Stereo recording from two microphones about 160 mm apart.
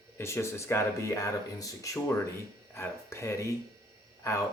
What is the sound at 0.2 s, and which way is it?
Speech, 15° left (ahead or behind).